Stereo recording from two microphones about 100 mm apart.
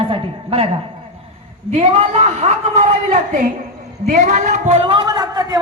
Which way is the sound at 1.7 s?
90° right.